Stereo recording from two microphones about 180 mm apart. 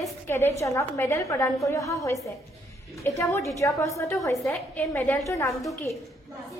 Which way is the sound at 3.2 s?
15° left (ahead or behind).